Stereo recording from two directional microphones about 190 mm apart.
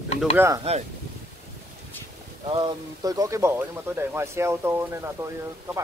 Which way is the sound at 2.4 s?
25° right (ahead or behind).